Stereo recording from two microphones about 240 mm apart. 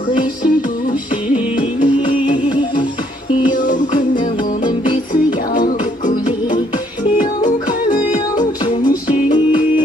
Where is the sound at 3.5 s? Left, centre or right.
Left.